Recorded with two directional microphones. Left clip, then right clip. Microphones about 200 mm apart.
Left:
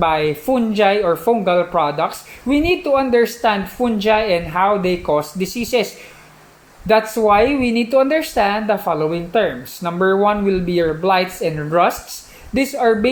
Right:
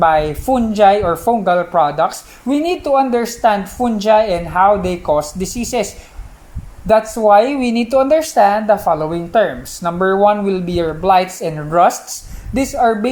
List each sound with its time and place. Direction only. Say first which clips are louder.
0.0 s speech: right 4 dB; 30° right (ahead or behind)
7.2 s speech: right 3 dB; 30° right (ahead or behind)